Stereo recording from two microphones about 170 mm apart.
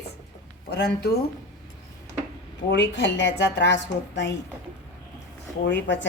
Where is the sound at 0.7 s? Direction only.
75° left (ahead or behind).